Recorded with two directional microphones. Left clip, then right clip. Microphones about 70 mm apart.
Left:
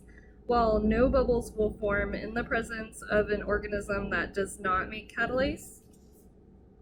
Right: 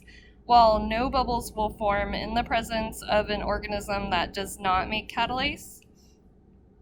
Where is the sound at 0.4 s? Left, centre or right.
Right.